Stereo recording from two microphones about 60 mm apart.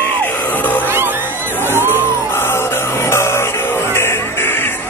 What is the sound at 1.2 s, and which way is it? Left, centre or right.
Music, left.